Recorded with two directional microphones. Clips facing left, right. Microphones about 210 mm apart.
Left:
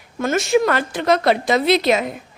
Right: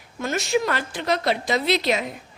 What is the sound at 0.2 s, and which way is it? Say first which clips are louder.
A woman's voice: left 6 dB; 55° left (ahead or behind).